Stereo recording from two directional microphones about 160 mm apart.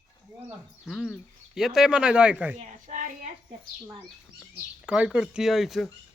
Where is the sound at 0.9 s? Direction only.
5° left (ahead or behind).